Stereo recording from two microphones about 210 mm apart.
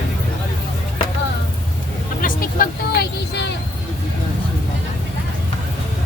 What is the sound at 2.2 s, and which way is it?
Vehicle, 45° left (ahead or behind).